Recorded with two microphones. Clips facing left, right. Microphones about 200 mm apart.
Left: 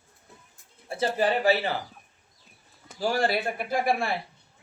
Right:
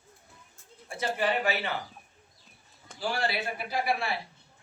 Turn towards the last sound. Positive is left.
turn(degrees=50)  # may be behind; listen again after turning